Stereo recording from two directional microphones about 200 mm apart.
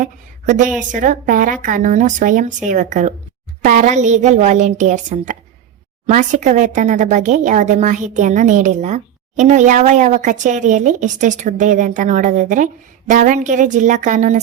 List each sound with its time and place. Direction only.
0.0 s a woman's voice: 40° right (ahead or behind)